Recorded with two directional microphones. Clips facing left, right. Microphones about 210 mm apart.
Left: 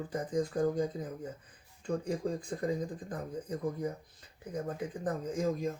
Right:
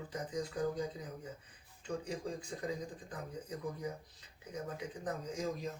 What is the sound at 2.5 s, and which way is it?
Speech, 50° left (ahead or behind).